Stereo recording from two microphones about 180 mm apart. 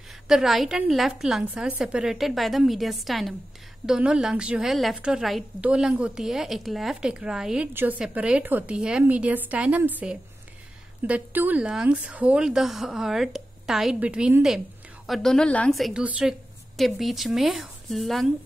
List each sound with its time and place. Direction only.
0.3 s a woman's voice: centre (ahead or behind)